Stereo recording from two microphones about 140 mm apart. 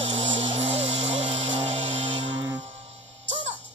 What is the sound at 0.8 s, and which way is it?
Music, 50° right (ahead or behind).